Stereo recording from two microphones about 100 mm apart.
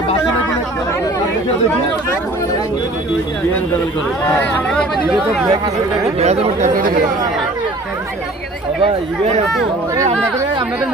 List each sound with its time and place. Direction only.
4.4 s speech: 10° left (ahead or behind)
6.1 s speech: 90° right